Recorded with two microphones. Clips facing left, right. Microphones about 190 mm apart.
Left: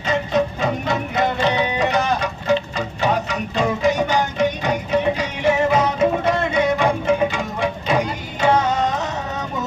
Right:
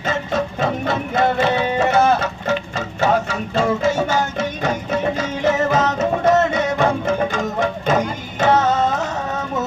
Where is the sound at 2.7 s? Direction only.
15° left (ahead or behind).